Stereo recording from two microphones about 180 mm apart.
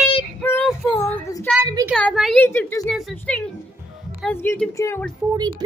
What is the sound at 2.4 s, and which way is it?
Speech, 15° left (ahead or behind).